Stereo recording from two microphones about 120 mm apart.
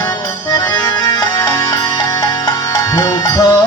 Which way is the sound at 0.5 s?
25° left (ahead or behind).